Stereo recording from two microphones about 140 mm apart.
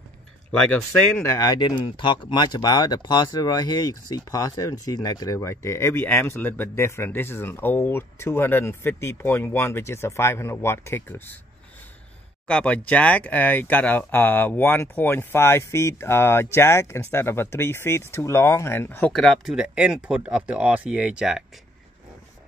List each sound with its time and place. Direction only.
0.5 s speech: 10° left (ahead or behind)
12.4 s speech: 10° left (ahead or behind); by 21.5 s 5° right (ahead or behind)